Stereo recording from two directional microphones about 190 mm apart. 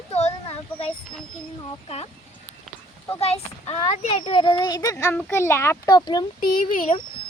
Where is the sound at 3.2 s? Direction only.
35° left (ahead or behind).